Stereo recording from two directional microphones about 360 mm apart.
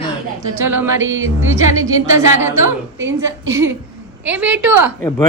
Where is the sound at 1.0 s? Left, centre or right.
Right.